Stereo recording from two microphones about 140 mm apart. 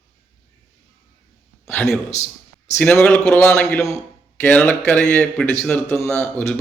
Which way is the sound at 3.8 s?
15° left (ahead or behind).